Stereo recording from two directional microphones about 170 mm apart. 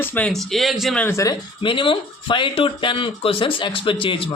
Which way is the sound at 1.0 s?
20° left (ahead or behind).